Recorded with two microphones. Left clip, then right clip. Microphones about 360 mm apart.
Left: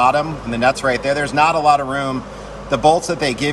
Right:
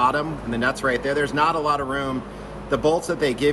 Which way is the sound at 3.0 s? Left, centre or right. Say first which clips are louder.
Left 3 dB; centre.